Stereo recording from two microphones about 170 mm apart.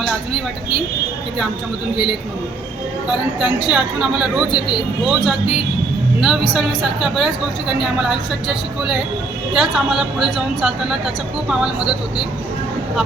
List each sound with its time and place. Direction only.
3.1 s a woman's voice: 5° right (ahead or behind)
4.5 s speech: 25° left (ahead or behind)
5.0 s a woman's voice: centre (ahead or behind)